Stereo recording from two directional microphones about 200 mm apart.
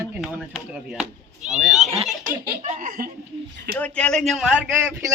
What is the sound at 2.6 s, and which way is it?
Laughter, 45° right (ahead or behind).